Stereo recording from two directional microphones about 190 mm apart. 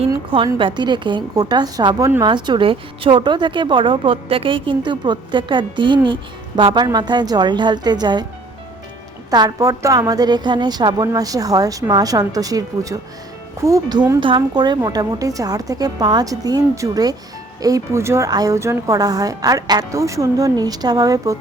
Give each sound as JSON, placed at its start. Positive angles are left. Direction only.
{"t": 0.1, "sound": "a woman's voice", "side_deg": -25}
{"t": 9.3, "sound": "a woman's voice", "side_deg": -20}